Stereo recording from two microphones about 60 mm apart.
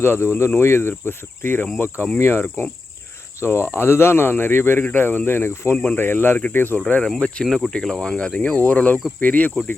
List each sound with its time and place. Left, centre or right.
0.0 s speech: left
5.7 s speech: centre
6.0 s speech: left
6.8 s speech: centre
7.4 s speech: centre
7.7 s speech: centre; by 9.5 s left